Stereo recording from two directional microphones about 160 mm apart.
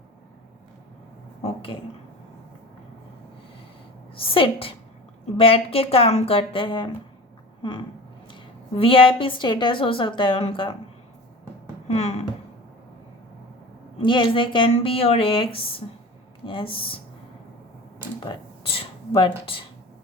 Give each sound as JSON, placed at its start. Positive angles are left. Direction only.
{"t": 1.4, "sound": "a sound", "side_deg": 35}
{"t": 4.1, "sound": "a woman's voice", "side_deg": 35}
{"t": 11.9, "sound": "a woman's voice", "side_deg": 40}
{"t": 14.0, "sound": "a woman's voice", "side_deg": 30}
{"t": 18.2, "sound": "speech", "side_deg": 35}